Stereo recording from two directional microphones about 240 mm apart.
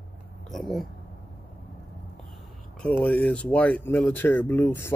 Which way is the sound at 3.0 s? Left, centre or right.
Centre.